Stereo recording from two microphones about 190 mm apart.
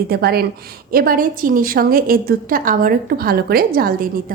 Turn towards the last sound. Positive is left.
turn(degrees=-50)  # may be behind; listen again after turning